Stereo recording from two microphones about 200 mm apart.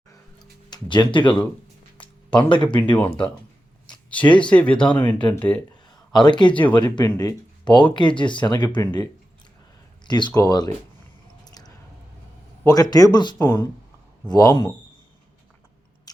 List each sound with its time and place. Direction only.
0.7 s speech: 25° left (ahead or behind)
2.0 s a sound: 25° left (ahead or behind)
2.7 s speech: 25° left (ahead or behind)
4.4 s speech: 5° left (ahead or behind)
6.1 s speech: 20° left (ahead or behind)
10.1 s speech: 20° left (ahead or behind)
11.4 s chewing: 20° left (ahead or behind)
12.6 s speech: 20° left (ahead or behind)
16.1 s a sound: 20° left (ahead or behind)